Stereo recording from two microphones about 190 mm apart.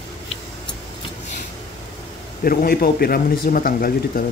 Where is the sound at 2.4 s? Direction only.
50° left (ahead or behind).